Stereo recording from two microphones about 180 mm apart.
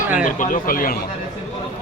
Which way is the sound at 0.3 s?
45° left (ahead or behind).